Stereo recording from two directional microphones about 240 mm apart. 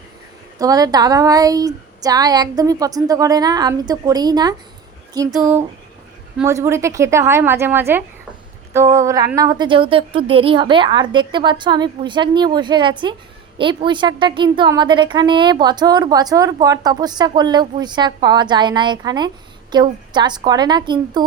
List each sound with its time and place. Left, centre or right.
0.6 s a woman's voice: centre
5.3 s a woman's voice: centre